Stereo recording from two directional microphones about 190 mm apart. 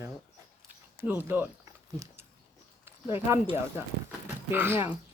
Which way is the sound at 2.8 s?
15° right (ahead or behind).